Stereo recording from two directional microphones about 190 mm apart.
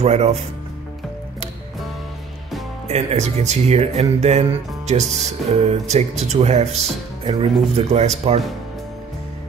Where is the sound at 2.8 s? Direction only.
35° right (ahead or behind).